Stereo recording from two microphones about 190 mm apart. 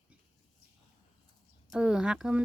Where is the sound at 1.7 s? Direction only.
5° right (ahead or behind).